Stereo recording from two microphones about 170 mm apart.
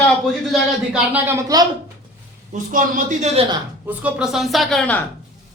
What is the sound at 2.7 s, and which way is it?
Speech, 50° right (ahead or behind).